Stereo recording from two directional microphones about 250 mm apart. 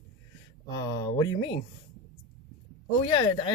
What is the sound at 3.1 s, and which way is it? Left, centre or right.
Speech, centre.